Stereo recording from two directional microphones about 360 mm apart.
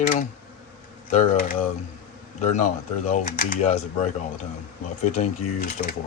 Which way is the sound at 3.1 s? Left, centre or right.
Left.